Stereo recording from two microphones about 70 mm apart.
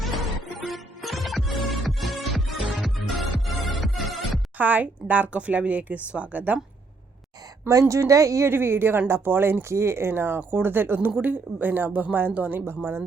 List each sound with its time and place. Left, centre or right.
0.0 s music: centre
4.5 s speech: right
7.7 s speech: right
8.4 s speech: right